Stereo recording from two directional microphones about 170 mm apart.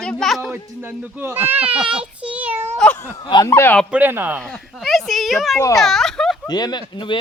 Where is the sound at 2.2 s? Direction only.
10° right (ahead or behind).